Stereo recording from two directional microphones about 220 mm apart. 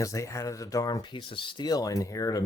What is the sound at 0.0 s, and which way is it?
Speech, 15° left (ahead or behind).